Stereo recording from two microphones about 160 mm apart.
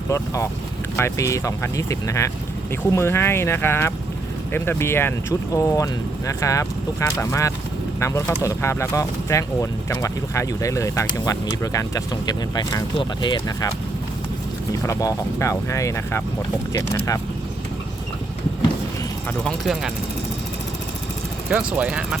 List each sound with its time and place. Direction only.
0.9 s speech: 20° left (ahead or behind)
14.7 s speech: 20° left (ahead or behind)
19.5 s speech: centre (ahead or behind)
21.5 s speech: 10° right (ahead or behind)